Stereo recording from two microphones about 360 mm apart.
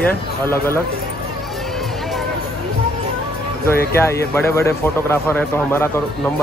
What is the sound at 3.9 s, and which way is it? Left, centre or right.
Speech, centre.